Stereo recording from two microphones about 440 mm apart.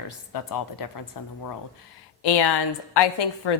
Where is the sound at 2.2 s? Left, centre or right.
Left.